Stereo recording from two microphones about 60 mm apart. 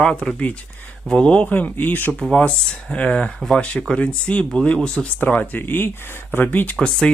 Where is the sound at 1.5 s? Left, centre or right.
Left.